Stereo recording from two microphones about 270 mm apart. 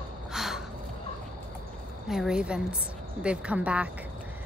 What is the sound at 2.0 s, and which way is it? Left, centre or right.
A woman's voice, centre.